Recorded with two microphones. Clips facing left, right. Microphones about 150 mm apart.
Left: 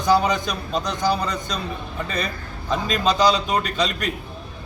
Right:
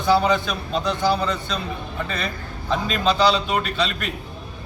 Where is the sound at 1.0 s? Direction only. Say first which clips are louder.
Even; 40° left (ahead or behind).